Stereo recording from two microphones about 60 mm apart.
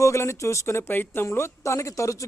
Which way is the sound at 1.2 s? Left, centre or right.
Left.